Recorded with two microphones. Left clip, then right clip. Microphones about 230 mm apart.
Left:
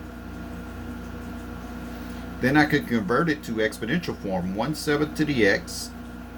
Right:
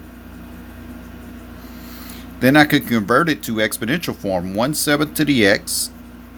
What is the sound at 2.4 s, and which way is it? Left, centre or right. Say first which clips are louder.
Speech: right 7 dB; right.